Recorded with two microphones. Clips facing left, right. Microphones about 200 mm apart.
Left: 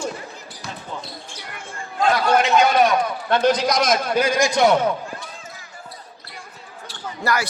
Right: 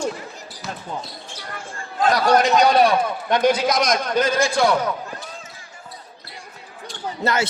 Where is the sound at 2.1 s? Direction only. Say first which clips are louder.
Right 2 dB; 40° right (ahead or behind).